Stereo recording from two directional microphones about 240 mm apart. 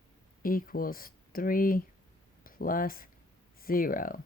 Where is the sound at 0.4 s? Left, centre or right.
Left.